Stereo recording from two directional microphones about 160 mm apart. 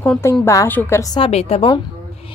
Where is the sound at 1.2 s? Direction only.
40° left (ahead or behind).